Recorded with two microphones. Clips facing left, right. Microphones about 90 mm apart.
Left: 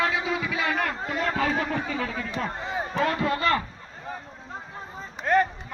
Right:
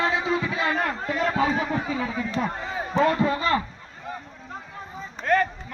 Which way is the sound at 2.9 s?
20° right (ahead or behind).